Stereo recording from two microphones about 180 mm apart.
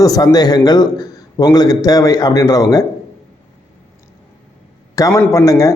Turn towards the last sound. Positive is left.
turn(degrees=20)  # may be behind; listen again after turning